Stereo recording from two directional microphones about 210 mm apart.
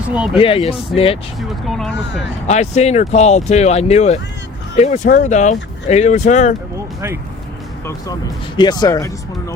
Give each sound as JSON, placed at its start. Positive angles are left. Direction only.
{"t": 0.3, "sound": "speech", "side_deg": 25}
{"t": 1.4, "sound": "speech", "side_deg": 0}
{"t": 2.5, "sound": "speech", "side_deg": 35}
{"t": 8.5, "sound": "speech", "side_deg": 20}